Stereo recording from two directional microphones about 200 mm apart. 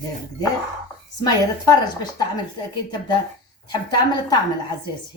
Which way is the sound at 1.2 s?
20° left (ahead or behind).